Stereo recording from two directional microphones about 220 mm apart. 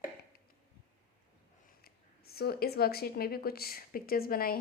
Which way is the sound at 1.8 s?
45° left (ahead or behind).